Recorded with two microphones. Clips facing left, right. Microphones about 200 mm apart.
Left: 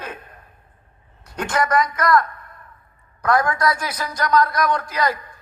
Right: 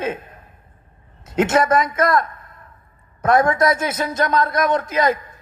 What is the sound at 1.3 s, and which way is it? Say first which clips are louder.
A man's voice: right 6 dB; 25° right (ahead or behind).